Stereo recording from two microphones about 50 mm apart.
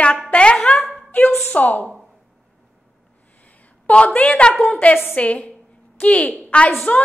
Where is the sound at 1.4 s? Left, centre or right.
Left.